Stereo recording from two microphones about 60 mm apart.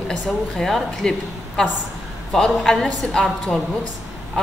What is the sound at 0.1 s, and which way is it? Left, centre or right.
A woman's voice, centre.